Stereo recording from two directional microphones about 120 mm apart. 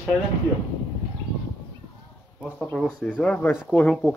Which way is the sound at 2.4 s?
5° left (ahead or behind).